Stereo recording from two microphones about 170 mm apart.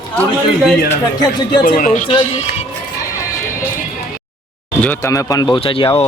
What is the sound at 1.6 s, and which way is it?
Speech, 55° left (ahead or behind).